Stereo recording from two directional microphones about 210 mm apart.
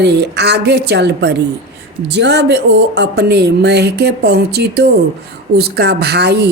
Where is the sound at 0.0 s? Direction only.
55° right (ahead or behind).